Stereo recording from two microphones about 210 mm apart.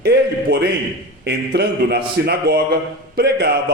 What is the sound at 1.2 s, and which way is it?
A man's voice, 50° right (ahead or behind).